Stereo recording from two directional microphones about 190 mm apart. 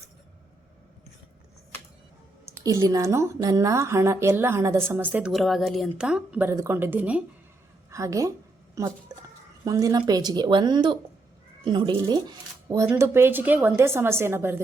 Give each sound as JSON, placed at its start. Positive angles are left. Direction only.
{"t": 2.6, "sound": "a woman's voice", "side_deg": -20}